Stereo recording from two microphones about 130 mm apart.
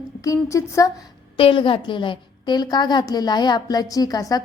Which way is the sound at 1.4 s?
40° left (ahead or behind).